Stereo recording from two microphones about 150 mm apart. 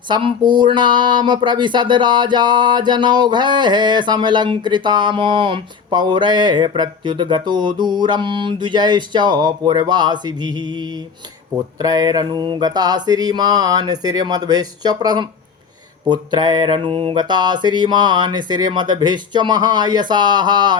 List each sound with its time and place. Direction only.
0.1 s speech: 30° right (ahead or behind)
11.5 s mantra: 25° right (ahead or behind)